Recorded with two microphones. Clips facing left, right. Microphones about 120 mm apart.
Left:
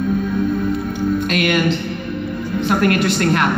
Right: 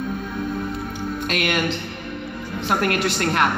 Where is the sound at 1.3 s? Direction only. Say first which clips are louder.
Left 2 dB; 30° right (ahead or behind).